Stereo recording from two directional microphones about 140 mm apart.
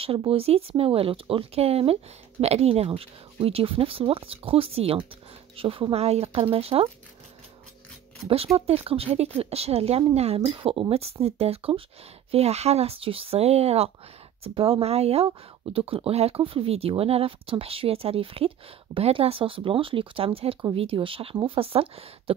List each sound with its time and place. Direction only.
0.0 s speech: 40° right (ahead or behind)
8.5 s speech: 45° right (ahead or behind)